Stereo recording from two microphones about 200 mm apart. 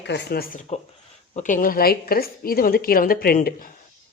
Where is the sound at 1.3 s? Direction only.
40° left (ahead or behind).